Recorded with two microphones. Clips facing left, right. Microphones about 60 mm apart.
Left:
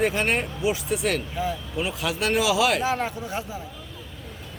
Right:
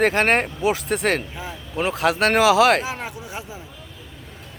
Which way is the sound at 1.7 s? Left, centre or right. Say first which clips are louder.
Right 10 dB; right.